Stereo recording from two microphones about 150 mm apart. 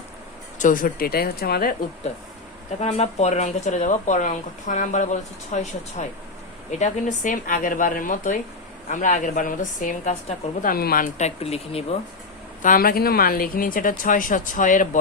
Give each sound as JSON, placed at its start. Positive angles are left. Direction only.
{"t": 0.6, "sound": "speech", "side_deg": 65}
{"t": 2.8, "sound": "speech", "side_deg": 45}
{"t": 11.3, "sound": "speech", "side_deg": 45}
{"t": 12.6, "sound": "speech", "side_deg": 75}